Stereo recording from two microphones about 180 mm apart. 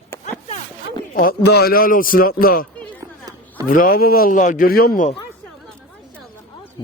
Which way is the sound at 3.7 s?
55° left (ahead or behind).